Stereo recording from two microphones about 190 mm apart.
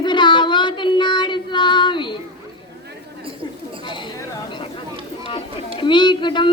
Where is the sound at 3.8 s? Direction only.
25° left (ahead or behind).